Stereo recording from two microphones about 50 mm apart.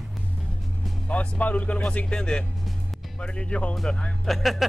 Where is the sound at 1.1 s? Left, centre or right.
Left.